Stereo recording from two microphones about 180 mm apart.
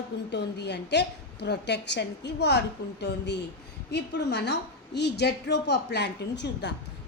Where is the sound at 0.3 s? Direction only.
70° left (ahead or behind).